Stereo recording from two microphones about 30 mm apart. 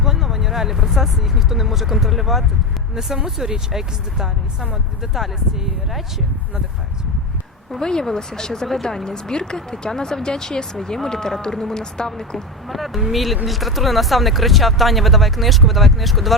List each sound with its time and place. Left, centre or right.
0.0 s speech: centre
5.1 s speech: centre
7.8 s speech: left
9.0 s speech: left
12.6 s speech: centre